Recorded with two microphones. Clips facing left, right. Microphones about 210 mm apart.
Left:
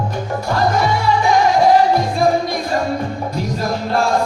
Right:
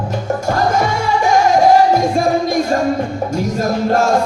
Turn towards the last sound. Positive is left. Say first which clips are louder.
# right 4 dB
turn(degrees=-45)  # may be behind; listen again after turning